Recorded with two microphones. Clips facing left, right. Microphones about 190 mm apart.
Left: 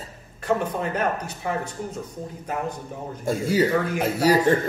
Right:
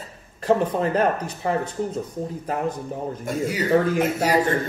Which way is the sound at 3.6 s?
30° right (ahead or behind).